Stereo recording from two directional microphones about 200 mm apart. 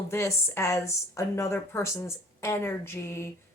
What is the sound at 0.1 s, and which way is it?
A woman's voice, 15° left (ahead or behind).